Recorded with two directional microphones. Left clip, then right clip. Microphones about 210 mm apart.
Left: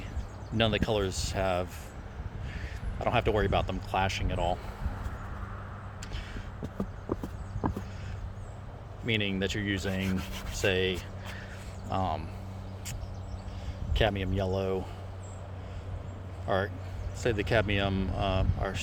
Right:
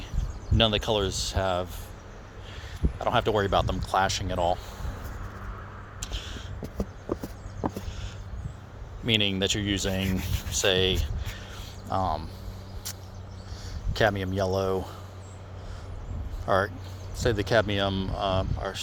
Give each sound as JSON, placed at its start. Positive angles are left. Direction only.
{"t": 0.5, "sound": "speech", "side_deg": -15}
{"t": 3.0, "sound": "speech", "side_deg": -10}
{"t": 6.0, "sound": "vehicle", "side_deg": -20}
{"t": 9.0, "sound": "speech", "side_deg": -25}
{"t": 11.9, "sound": "speech", "side_deg": -10}
{"t": 13.9, "sound": "speech", "side_deg": -20}
{"t": 16.5, "sound": "speech", "side_deg": -20}